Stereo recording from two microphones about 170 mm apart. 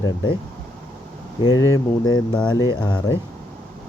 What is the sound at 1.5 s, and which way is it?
Speech, 20° left (ahead or behind).